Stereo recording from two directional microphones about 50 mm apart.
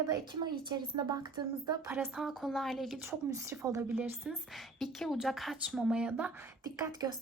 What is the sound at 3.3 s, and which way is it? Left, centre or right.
Speech, right.